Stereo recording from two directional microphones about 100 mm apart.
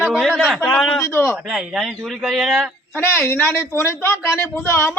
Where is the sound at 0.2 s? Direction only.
Centre (ahead or behind).